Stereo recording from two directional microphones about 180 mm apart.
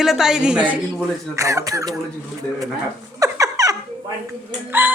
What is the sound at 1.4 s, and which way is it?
Speech, 15° right (ahead or behind).